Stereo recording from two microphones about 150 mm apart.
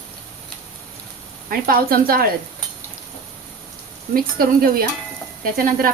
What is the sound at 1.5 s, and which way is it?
Speech, 75° right (ahead or behind).